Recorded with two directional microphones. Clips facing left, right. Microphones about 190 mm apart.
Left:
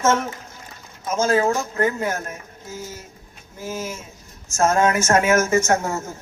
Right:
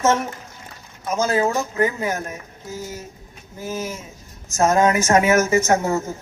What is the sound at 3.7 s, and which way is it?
Speech, 15° right (ahead or behind).